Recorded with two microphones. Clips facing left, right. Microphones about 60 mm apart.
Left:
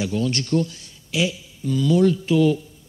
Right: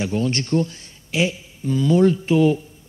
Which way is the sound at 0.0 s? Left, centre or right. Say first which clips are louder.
Right 1 dB; right.